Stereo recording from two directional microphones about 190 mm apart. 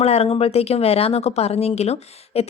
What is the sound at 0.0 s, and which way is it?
Speech, 35° left (ahead or behind).